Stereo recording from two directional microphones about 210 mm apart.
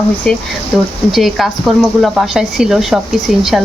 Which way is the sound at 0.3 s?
5° left (ahead or behind).